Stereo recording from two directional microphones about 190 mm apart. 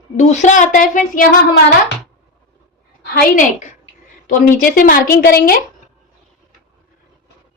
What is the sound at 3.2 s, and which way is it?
A woman's voice, 45° left (ahead or behind).